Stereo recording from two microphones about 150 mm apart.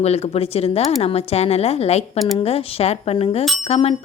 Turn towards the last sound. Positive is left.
turn(degrees=40)  # may be behind; listen again after turning